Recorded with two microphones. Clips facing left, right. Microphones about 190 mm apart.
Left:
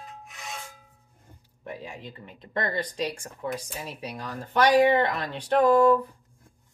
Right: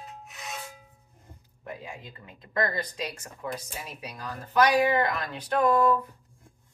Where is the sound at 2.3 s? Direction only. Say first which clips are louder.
Even; 30° left (ahead or behind).